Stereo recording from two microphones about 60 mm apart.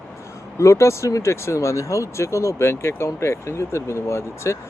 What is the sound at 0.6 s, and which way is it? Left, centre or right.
Speech, left.